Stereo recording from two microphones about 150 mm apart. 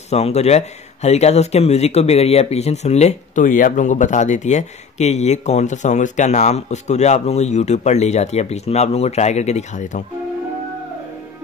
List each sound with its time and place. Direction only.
0.1 s speech: 45° left (ahead or behind)